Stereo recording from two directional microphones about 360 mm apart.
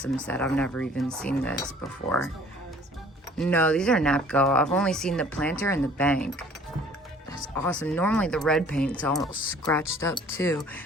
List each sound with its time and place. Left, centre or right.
0.0 s speech: centre
3.3 s speech: centre